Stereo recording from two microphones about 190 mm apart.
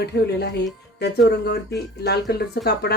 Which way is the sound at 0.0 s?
60° left (ahead or behind).